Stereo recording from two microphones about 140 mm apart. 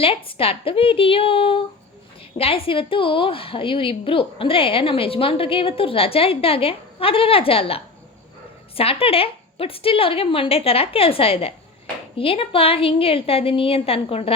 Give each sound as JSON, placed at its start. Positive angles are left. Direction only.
{"t": 0.0, "sound": "a woman's voice", "side_deg": 40}